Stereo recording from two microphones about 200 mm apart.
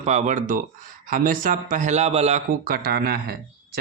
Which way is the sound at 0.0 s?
35° right (ahead or behind).